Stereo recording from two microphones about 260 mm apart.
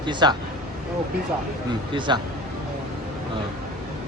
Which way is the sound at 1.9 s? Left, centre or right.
Centre.